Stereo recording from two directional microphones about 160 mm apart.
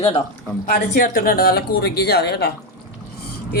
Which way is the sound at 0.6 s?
60° left (ahead or behind).